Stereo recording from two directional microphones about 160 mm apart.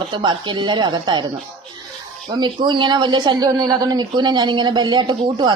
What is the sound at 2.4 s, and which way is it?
A woman's voice, 30° right (ahead or behind).